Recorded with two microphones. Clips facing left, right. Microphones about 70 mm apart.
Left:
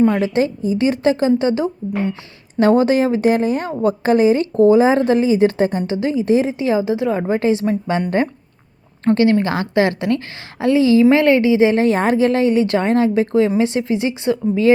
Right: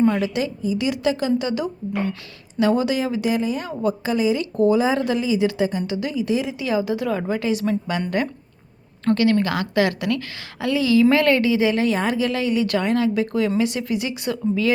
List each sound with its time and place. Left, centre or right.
0.1 s a woman's voice: left
2.6 s a woman's voice: left
9.0 s a woman's voice: left